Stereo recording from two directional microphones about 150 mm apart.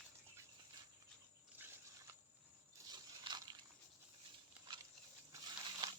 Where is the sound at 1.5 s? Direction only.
15° right (ahead or behind).